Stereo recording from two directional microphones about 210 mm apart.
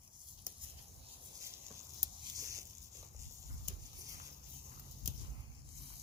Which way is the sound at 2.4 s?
15° right (ahead or behind).